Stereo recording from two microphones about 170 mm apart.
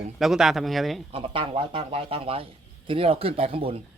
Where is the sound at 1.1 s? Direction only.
30° right (ahead or behind).